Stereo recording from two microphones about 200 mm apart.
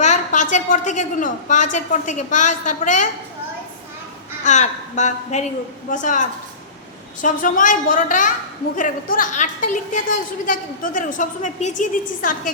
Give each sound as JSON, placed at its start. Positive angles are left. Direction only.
{"t": 0.0, "sound": "a woman's voice", "side_deg": 35}
{"t": 4.4, "sound": "a woman's voice", "side_deg": 35}